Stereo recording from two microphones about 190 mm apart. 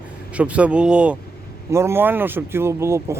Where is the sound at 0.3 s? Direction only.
5° right (ahead or behind).